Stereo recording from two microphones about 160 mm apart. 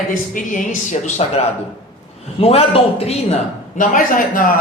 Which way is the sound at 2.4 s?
40° left (ahead or behind).